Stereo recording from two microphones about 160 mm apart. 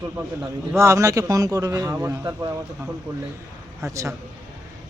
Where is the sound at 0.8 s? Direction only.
20° right (ahead or behind).